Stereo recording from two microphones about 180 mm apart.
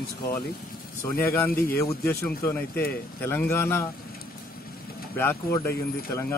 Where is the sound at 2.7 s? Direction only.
60° left (ahead or behind).